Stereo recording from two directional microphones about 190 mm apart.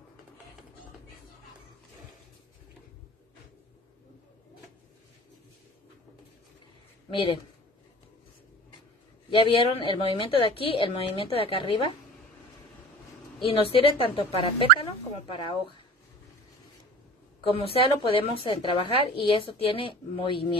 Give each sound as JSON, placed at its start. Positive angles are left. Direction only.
{"t": 7.1, "sound": "speech", "side_deg": 25}
{"t": 9.3, "sound": "a woman's voice", "side_deg": 30}
{"t": 13.5, "sound": "a woman's voice", "side_deg": 30}
{"t": 17.4, "sound": "a woman's voice", "side_deg": 30}